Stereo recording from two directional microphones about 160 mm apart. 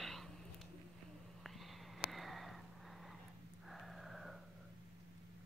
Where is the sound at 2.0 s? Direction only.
Centre (ahead or behind).